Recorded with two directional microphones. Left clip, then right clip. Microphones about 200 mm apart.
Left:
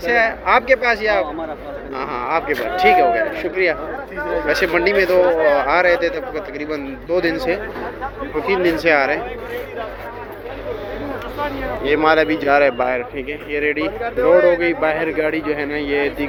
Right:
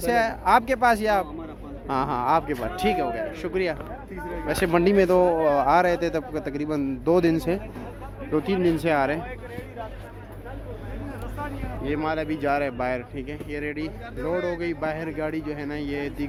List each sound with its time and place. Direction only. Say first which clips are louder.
0.0 s speech: left 6 dB; 30° right (ahead or behind)
8.4 s speech: left 9 dB; 20° right (ahead or behind)
11.3 s speech: left 11 dB; centre (ahead or behind)